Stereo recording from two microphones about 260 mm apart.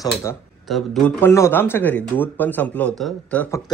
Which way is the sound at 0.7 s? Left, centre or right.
Centre.